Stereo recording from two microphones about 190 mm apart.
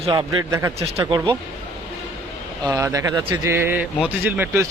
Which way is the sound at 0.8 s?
30° right (ahead or behind).